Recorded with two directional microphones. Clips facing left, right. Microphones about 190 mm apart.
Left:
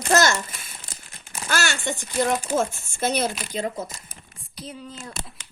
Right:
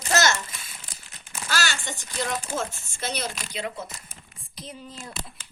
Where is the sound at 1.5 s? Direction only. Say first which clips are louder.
Left 4 dB; 55° left (ahead or behind); by 4.1 s 40° left (ahead or behind).